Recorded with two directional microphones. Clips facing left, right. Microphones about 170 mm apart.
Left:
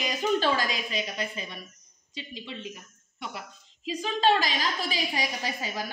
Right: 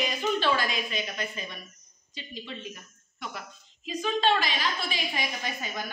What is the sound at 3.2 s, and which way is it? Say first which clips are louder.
A woman's voice: left 1 dB; 25° left (ahead or behind).